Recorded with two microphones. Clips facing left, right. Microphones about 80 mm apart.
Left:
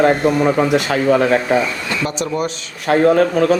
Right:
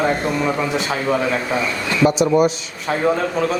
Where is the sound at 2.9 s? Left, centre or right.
Left.